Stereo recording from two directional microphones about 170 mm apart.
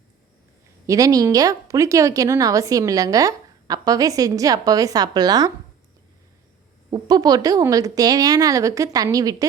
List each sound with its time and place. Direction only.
0.9 s a woman's voice: 20° right (ahead or behind)
6.9 s a woman's voice: 25° right (ahead or behind)